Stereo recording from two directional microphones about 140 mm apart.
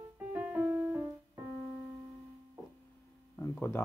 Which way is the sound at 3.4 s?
15° left (ahead or behind).